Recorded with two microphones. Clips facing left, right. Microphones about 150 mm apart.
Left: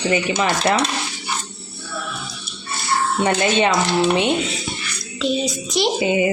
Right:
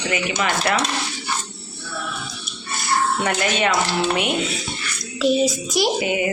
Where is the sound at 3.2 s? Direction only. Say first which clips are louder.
Left 4 dB; 25° left (ahead or behind).